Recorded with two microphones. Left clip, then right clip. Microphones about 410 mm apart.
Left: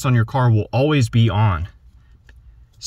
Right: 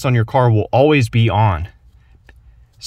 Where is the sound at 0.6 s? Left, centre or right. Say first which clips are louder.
Right 6 dB; right.